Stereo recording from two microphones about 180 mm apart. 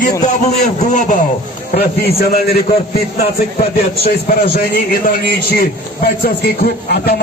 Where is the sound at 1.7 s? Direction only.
60° left (ahead or behind).